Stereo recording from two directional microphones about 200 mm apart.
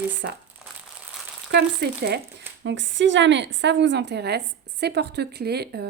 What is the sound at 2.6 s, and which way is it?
A woman's voice, 65° right (ahead or behind).